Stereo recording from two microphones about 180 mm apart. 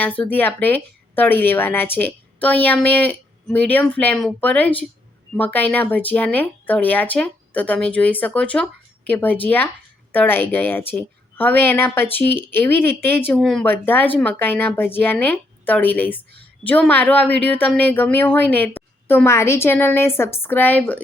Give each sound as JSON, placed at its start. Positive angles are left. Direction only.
{"t": 0.0, "sound": "a woman's voice", "side_deg": 10}